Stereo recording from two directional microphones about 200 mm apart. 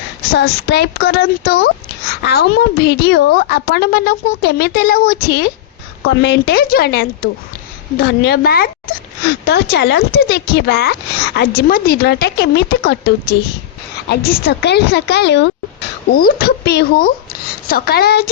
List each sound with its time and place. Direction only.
0.3 s a woman's voice: 55° left (ahead or behind)